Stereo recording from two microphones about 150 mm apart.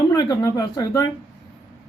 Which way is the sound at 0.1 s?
25° left (ahead or behind).